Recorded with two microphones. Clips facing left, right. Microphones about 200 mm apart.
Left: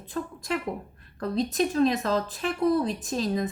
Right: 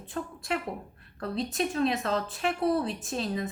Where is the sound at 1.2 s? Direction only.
35° left (ahead or behind).